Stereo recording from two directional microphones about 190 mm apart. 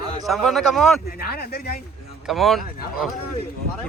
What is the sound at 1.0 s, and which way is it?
Speech, 55° left (ahead or behind).